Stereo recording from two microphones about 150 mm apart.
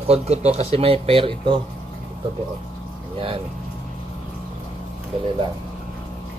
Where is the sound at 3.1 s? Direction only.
40° right (ahead or behind).